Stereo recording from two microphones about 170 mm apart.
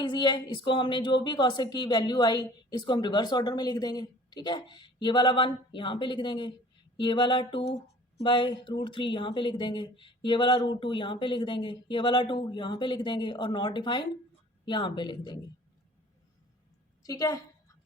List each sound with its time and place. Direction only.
0.0 s a woman's voice: 25° left (ahead or behind)
17.0 s a woman's voice: 20° left (ahead or behind)